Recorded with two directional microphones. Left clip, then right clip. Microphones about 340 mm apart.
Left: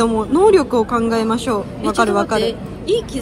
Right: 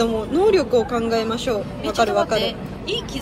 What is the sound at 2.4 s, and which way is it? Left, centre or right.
Speech, centre.